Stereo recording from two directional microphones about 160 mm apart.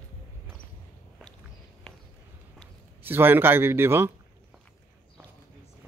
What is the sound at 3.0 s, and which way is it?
A man's voice, 15° right (ahead or behind).